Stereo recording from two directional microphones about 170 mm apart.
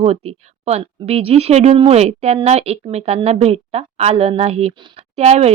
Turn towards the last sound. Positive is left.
turn(degrees=-40)  # may be behind; listen again after turning